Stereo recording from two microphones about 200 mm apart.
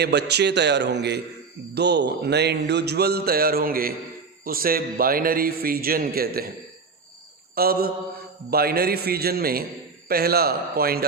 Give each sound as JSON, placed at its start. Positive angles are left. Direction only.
{"t": 0.0, "sound": "a man's voice", "side_deg": -55}
{"t": 7.5, "sound": "mantra", "side_deg": -50}
{"t": 8.4, "sound": "a man's voice", "side_deg": -50}